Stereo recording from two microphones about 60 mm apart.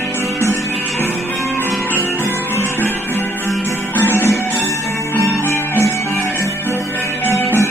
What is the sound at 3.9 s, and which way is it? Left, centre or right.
Music, left.